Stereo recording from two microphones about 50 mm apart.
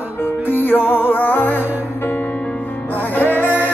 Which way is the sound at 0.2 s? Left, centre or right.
Left.